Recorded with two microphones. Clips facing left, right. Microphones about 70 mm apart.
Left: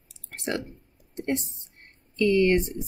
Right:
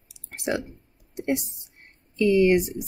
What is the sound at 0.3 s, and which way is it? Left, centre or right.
A woman's voice, centre.